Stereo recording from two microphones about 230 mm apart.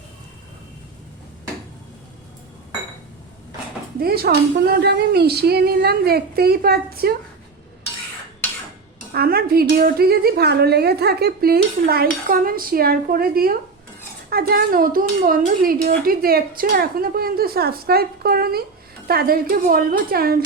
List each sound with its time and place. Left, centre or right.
4.0 s speech: right
9.1 s a woman's voice: right